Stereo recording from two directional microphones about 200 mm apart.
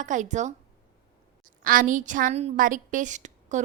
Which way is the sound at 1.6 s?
45° right (ahead or behind).